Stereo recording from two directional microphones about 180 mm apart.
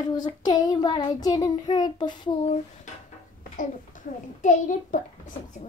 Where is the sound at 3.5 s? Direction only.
45° left (ahead or behind).